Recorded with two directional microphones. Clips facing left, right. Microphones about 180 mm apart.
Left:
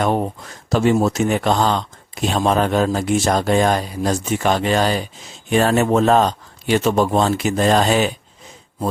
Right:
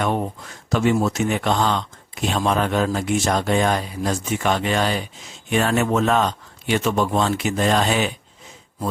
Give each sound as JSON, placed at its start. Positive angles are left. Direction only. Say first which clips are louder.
{"t": 0.0, "sound": "speech", "louder": "left 3 dB", "side_deg": 35}